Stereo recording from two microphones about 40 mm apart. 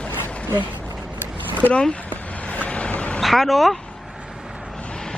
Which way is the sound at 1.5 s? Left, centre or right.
Left.